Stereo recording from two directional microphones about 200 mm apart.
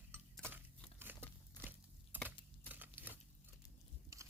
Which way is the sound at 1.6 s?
10° right (ahead or behind).